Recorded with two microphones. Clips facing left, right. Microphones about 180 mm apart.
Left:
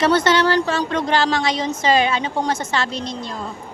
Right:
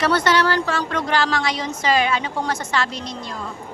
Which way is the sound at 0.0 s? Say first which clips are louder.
Left 2 dB; 20° left (ahead or behind).